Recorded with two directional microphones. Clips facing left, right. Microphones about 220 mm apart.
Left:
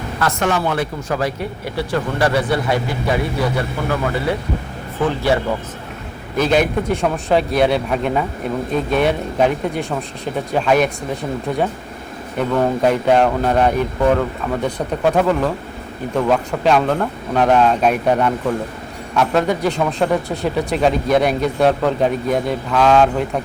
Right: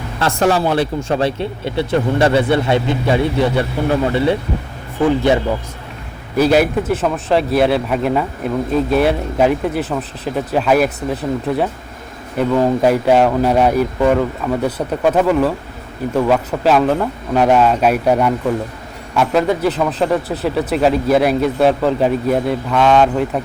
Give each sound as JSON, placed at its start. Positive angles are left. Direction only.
{"t": 0.2, "sound": "speech", "side_deg": -30}
{"t": 6.3, "sound": "speech", "side_deg": -10}